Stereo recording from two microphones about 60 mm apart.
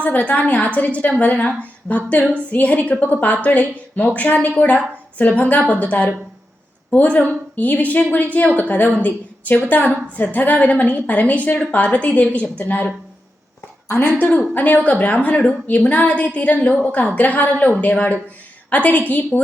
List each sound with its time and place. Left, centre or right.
0.0 s a woman's voice: left
13.8 s speech: left
14.2 s a woman's voice: left